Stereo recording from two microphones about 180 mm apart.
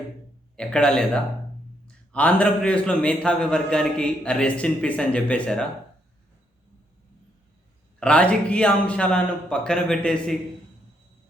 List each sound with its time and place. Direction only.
0.5 s a man's voice: 5° left (ahead or behind)
7.9 s a man's voice: 5° left (ahead or behind)